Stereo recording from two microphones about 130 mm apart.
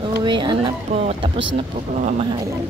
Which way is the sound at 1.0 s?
50° right (ahead or behind).